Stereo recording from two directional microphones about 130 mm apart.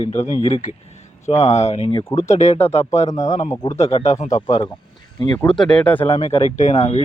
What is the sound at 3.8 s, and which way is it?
Speech, 55° left (ahead or behind).